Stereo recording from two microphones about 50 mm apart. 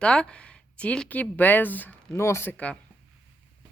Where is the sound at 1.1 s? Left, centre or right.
Left.